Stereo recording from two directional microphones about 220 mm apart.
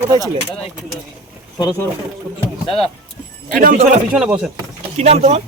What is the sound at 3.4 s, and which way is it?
Speech, 35° right (ahead or behind).